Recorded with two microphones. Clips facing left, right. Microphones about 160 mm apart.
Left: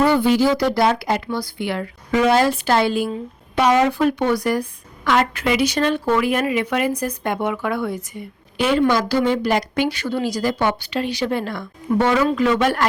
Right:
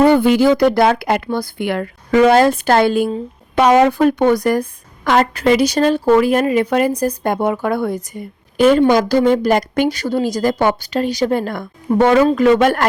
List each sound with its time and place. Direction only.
0.0 s a woman's voice: 55° right (ahead or behind)